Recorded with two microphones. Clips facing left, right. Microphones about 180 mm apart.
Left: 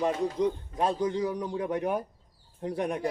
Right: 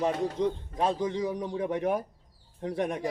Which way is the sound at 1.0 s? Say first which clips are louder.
Left 1 dB; 20° right (ahead or behind).